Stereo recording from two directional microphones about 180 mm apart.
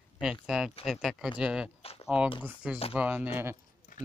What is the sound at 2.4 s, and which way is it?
Speech, 10° right (ahead or behind).